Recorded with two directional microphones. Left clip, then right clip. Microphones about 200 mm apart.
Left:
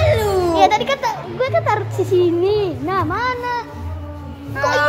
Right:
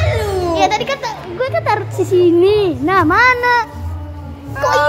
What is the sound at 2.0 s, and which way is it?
Speech, 10° right (ahead or behind).